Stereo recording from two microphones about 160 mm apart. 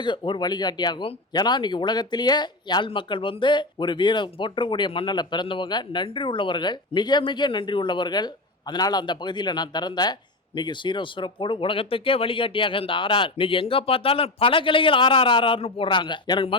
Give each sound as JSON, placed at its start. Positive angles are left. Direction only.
{"t": 0.0, "sound": "speech", "side_deg": 30}